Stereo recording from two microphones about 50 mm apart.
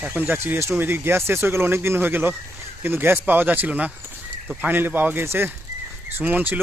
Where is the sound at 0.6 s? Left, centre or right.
Right.